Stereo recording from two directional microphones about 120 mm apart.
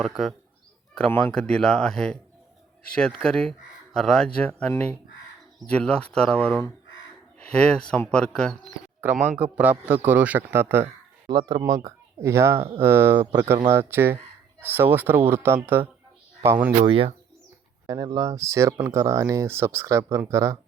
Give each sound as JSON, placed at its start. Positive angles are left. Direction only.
{"t": 0.0, "sound": "speech", "side_deg": 0}
{"t": 5.7, "sound": "speech", "side_deg": 10}
{"t": 9.0, "sound": "a man's voice", "side_deg": -15}
{"t": 11.3, "sound": "a man's voice", "side_deg": -35}
{"t": 16.8, "sound": "speech", "side_deg": -50}
{"t": 17.8, "sound": "speech", "side_deg": -30}